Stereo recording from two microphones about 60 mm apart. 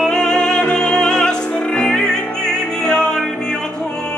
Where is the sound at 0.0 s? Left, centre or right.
Centre.